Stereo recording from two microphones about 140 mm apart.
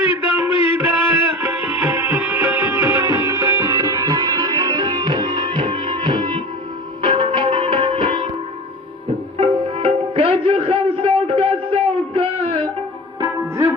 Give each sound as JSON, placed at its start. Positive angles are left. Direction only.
{"t": 0.0, "sound": "a sound", "side_deg": -15}
{"t": 0.7, "sound": "music", "side_deg": -10}
{"t": 9.4, "sound": "music", "side_deg": -40}